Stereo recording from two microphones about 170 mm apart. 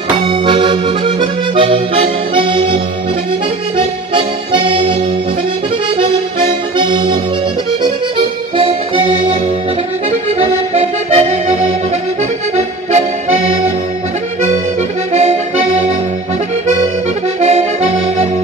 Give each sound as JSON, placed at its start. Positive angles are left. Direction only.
{"t": 0.3, "sound": "accordion", "side_deg": -30}
{"t": 5.9, "sound": "music", "side_deg": -30}
{"t": 8.5, "sound": "accordion", "side_deg": -30}
{"t": 10.4, "sound": "accordion", "side_deg": -40}
{"t": 15.1, "sound": "accordion", "side_deg": -40}
{"t": 17.4, "sound": "accordion", "side_deg": -40}